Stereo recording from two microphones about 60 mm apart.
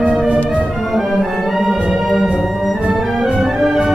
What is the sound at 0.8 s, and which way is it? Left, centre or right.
Music, centre.